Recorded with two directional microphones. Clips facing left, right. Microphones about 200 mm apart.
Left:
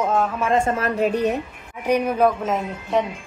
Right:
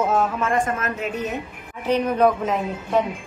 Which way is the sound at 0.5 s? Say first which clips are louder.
Left 3 dB; 30° left (ahead or behind).